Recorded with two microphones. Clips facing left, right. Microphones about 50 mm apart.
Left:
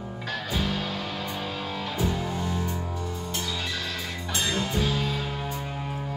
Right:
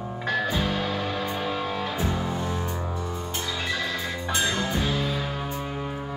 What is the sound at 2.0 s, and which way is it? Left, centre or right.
Music, right.